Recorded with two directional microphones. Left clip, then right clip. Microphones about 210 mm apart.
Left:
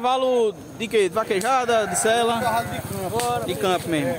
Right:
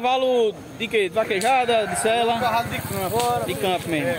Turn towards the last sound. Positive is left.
turn(degrees=10)  # may be behind; listen again after turning